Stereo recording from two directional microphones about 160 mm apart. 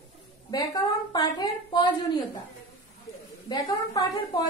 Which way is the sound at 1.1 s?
25° left (ahead or behind).